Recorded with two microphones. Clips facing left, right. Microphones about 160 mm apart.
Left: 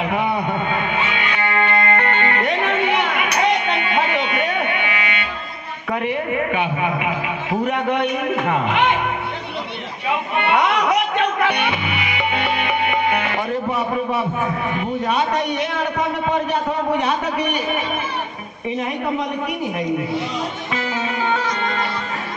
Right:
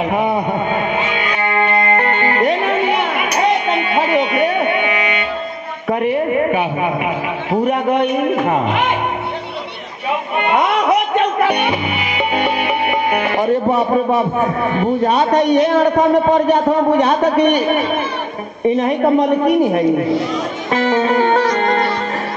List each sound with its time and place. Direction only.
0.1 s music: 35° right (ahead or behind)
5.9 s a sound: 35° right (ahead or behind)
7.9 s music: 35° right (ahead or behind)
10.5 s music: 35° right (ahead or behind)
13.1 s a man's voice: 40° right (ahead or behind)
18.8 s a man's voice: 40° right (ahead or behind)
20.9 s music: 45° right (ahead or behind)